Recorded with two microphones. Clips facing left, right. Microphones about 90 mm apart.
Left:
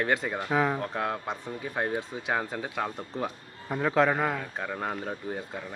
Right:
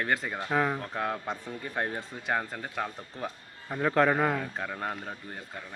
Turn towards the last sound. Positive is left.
turn(degrees=0)  # may be behind; listen again after turning